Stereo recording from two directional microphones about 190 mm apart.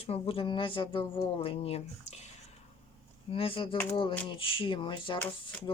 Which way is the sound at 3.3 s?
30° left (ahead or behind).